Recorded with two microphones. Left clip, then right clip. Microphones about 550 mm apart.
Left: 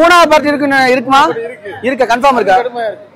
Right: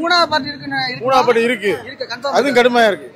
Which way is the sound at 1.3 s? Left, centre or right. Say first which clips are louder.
Right 6 dB; right.